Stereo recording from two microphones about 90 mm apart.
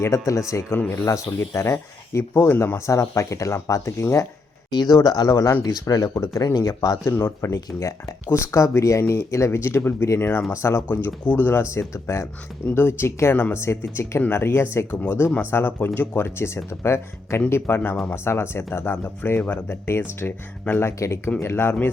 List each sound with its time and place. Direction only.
0.0 s speech: 35° left (ahead or behind)
4.7 s speech: 50° left (ahead or behind)
7.1 s speech: 25° left (ahead or behind)
10.8 s speech: 15° left (ahead or behind)